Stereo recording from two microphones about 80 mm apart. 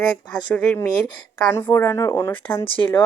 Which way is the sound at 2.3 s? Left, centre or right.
Left.